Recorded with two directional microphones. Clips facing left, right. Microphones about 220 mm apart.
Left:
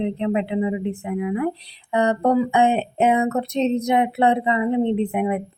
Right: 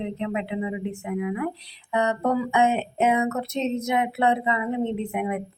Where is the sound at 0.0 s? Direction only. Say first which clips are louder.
Left 6 dB; 35° left (ahead or behind).